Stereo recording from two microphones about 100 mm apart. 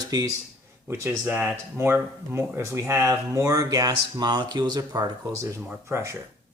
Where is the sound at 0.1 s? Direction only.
35° right (ahead or behind).